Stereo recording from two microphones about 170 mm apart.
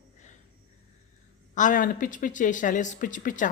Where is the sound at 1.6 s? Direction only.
50° left (ahead or behind).